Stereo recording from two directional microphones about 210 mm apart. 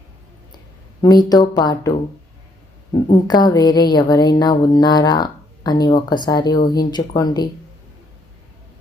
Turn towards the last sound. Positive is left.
turn(degrees=20)  # may be behind; listen again after turning